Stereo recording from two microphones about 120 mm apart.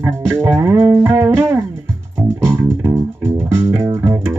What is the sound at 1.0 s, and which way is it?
Music, 20° right (ahead or behind).